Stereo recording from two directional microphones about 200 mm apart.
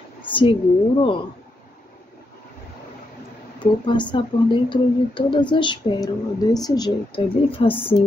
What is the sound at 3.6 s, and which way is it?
Speech, 25° left (ahead or behind).